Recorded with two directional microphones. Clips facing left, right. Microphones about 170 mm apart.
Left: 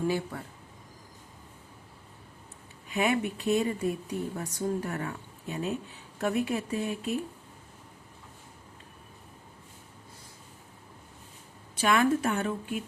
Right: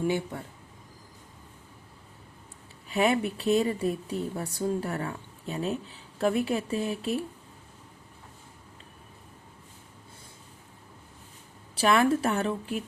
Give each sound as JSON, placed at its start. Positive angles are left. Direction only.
{"t": 2.9, "sound": "a woman's voice", "side_deg": -35}
{"t": 11.8, "sound": "speech", "side_deg": -35}